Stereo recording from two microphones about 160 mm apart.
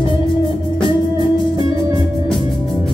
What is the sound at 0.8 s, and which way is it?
Music, 30° left (ahead or behind).